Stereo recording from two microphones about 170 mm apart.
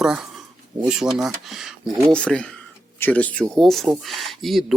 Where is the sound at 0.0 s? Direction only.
5° right (ahead or behind).